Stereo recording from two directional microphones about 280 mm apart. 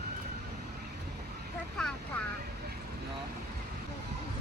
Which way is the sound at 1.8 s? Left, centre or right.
Centre.